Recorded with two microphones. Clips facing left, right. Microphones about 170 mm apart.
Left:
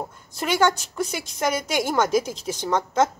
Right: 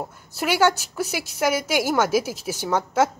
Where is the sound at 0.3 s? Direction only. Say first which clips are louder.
Right 1 dB; 5° right (ahead or behind).